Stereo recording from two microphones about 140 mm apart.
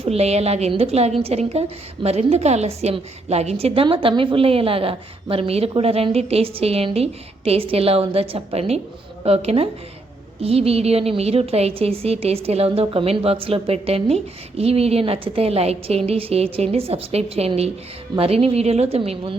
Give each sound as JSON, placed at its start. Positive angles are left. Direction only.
{"t": 0.0, "sound": "a woman's voice", "side_deg": -45}
{"t": 3.8, "sound": "a woman's voice", "side_deg": -35}